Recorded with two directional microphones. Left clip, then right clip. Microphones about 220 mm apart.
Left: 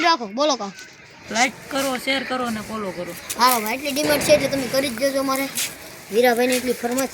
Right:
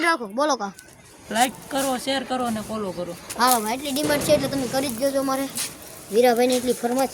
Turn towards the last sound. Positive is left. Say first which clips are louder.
# even
turn(degrees=5)  # may be behind; listen again after turning